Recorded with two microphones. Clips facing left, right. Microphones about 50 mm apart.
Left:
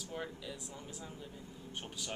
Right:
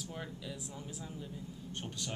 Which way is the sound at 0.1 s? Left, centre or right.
Centre.